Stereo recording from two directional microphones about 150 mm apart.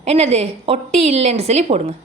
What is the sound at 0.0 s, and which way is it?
A woman's voice, 45° right (ahead or behind).